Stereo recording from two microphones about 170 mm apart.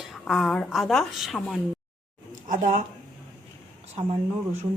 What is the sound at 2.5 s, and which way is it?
Speech, 50° right (ahead or behind).